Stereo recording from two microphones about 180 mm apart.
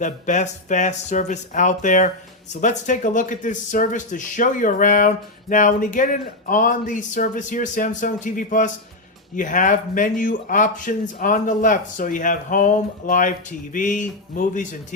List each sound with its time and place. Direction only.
0.0 s speech: 45° left (ahead or behind)